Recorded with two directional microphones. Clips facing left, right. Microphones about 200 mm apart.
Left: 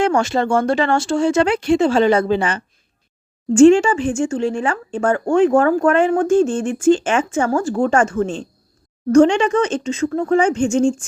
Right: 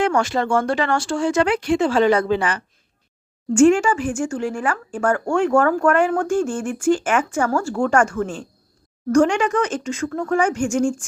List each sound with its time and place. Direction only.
0.0 s speech: 25° left (ahead or behind)